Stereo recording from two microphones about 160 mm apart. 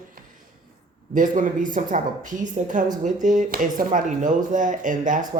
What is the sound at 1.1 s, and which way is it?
Speech, 55° right (ahead or behind).